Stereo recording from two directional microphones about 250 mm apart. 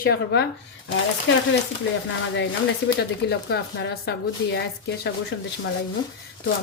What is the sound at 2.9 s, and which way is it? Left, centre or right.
A woman's voice, left.